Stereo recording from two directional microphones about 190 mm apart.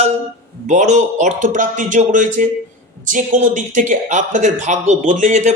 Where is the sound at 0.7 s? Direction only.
40° right (ahead or behind).